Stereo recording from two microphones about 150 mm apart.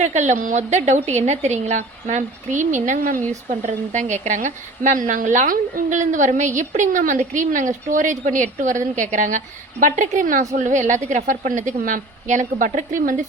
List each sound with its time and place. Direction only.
0.0 s speech: 50° right (ahead or behind)
3.5 s a woman's voice: 50° right (ahead or behind)